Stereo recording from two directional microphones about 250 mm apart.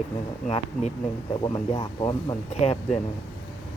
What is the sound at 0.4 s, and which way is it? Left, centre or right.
Speech, left.